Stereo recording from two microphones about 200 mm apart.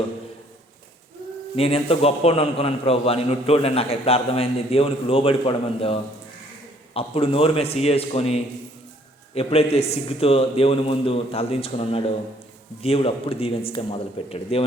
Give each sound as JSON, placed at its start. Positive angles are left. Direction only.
{"t": 1.5, "sound": "a man's voice", "side_deg": 30}